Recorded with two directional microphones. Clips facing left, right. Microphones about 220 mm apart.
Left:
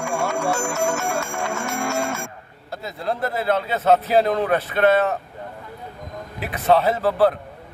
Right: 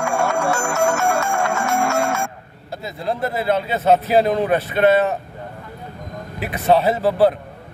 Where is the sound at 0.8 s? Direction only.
65° right (ahead or behind).